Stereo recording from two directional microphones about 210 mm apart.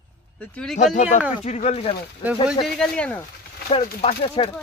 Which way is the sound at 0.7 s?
35° left (ahead or behind).